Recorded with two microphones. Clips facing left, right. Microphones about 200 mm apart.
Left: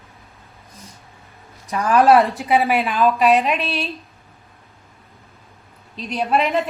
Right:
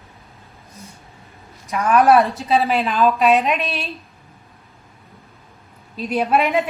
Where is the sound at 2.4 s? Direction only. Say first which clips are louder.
Even; 15° left (ahead or behind).